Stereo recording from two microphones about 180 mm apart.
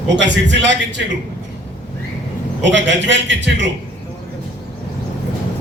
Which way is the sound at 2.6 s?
85° right.